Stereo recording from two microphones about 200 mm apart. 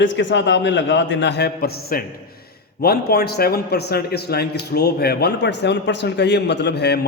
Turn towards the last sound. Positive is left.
turn(degrees=55)  # may be behind; listen again after turning